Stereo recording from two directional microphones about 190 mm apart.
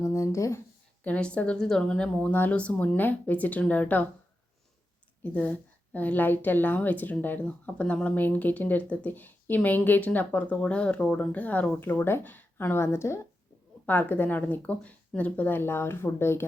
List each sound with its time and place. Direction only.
0.0 s a woman's voice: 15° left (ahead or behind)
5.2 s a woman's voice: 10° left (ahead or behind)